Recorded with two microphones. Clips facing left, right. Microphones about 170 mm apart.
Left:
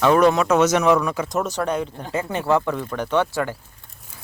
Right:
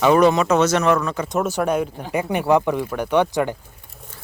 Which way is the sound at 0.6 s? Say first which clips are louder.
Left 1 dB; 10° left (ahead or behind).